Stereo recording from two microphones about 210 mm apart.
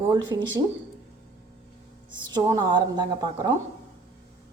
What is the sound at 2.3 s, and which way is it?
A woman's voice, 20° right (ahead or behind).